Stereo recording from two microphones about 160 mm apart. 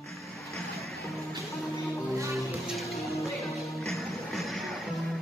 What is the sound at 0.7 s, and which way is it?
Music, centre (ahead or behind).